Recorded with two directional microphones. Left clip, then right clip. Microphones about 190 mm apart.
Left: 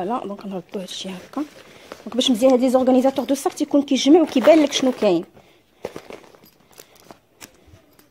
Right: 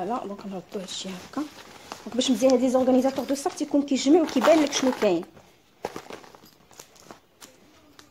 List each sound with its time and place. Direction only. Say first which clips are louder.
0.0 s a woman's voice: left 5 dB; 45° left (ahead or behind)